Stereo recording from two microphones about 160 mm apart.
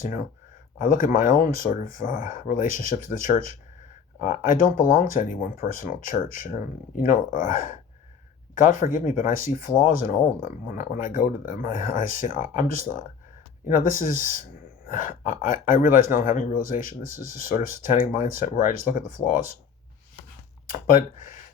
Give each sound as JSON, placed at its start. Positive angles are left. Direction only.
{"t": 0.0, "sound": "speech", "side_deg": 55}
{"t": 13.7, "sound": "speech", "side_deg": 55}
{"t": 20.8, "sound": "speech", "side_deg": 60}